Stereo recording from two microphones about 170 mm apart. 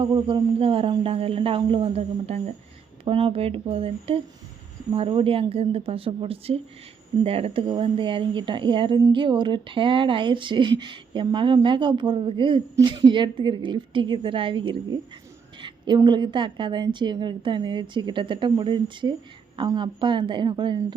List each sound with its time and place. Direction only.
0.0 s speech: 25° right (ahead or behind)
16.0 s speech: 25° right (ahead or behind)